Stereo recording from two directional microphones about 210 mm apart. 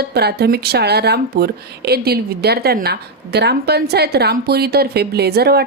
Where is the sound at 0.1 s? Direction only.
50° right (ahead or behind).